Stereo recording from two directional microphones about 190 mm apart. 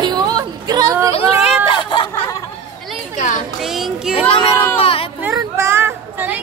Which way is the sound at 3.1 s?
40° left (ahead or behind).